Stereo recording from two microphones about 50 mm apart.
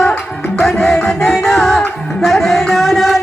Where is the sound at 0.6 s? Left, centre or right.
Centre.